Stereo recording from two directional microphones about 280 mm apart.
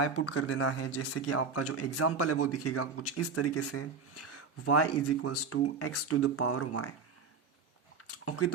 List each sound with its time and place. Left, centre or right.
0.0 s speech: left
8.0 s speech: left